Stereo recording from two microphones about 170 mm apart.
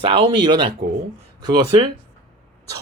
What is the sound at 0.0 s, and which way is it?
Speech, 30° right (ahead or behind).